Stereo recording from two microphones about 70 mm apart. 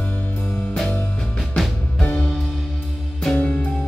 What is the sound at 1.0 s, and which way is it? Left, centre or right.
Music, centre.